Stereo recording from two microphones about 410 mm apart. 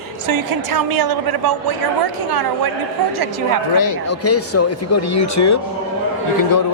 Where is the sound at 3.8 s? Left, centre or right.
Left.